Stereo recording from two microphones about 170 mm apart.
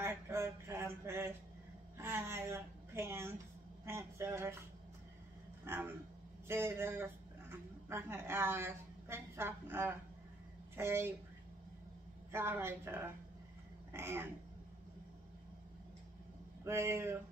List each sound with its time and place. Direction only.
0.0 s a sound: 15° right (ahead or behind)
3.8 s speech: 15° right (ahead or behind)
5.7 s a woman's voice: 15° right (ahead or behind)
12.3 s a woman's voice: 15° right (ahead or behind)
16.6 s a woman's voice: 15° right (ahead or behind)